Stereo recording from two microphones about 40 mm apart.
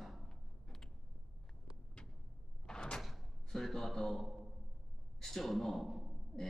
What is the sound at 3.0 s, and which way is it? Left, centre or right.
Door, centre.